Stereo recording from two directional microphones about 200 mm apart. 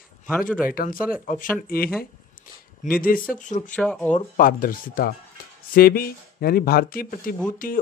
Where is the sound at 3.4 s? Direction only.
40° left (ahead or behind).